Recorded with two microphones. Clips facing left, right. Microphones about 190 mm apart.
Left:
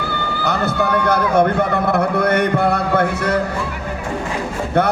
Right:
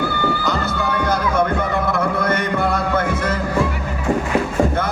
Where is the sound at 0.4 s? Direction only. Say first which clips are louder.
Left 3 dB; 60° left (ahead or behind).